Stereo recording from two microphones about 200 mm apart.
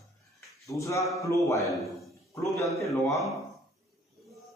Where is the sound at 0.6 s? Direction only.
15° left (ahead or behind).